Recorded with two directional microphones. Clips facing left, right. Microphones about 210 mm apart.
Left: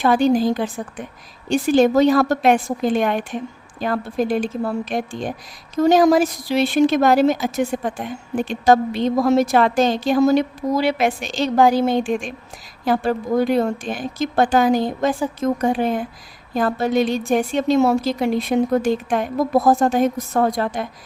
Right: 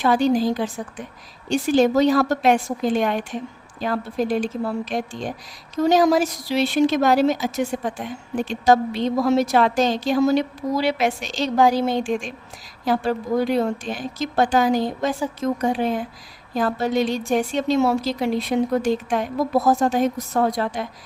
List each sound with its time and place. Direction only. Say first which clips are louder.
0.0 s a woman's voice: left 2 dB; 55° left (ahead or behind)